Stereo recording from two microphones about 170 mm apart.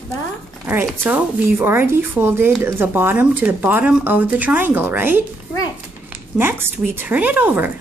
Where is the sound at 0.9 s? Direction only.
5° right (ahead or behind).